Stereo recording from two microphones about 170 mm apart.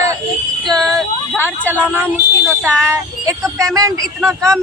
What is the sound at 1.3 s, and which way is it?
Speech, 10° right (ahead or behind).